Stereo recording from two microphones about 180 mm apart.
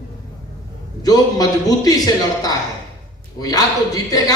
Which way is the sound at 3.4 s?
20° left (ahead or behind).